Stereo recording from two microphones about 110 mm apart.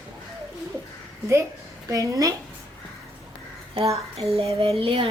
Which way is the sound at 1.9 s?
30° right (ahead or behind).